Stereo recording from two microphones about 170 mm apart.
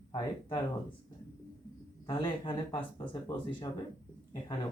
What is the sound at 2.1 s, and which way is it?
Speech, 25° left (ahead or behind).